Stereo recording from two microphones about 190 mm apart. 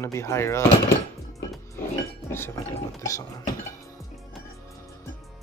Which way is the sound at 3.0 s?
15° left (ahead or behind).